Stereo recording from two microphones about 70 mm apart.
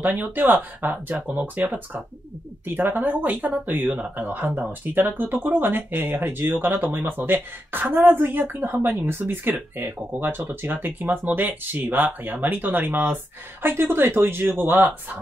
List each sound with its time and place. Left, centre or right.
0.0 s speech: right